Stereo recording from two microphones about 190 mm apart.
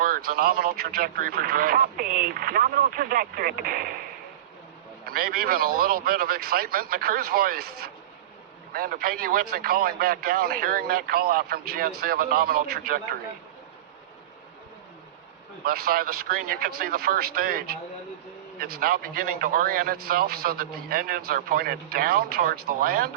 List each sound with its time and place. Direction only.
0.0 s a man's voice: 50° right (ahead or behind)
5.0 s a man's voice: 50° right (ahead or behind)
15.6 s a man's voice: 50° right (ahead or behind)